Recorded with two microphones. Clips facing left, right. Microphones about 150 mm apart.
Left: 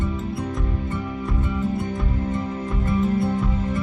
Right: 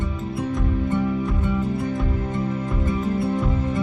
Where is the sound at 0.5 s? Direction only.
Centre (ahead or behind).